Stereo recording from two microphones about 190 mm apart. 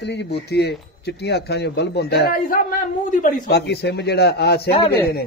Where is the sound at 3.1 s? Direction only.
40° left (ahead or behind).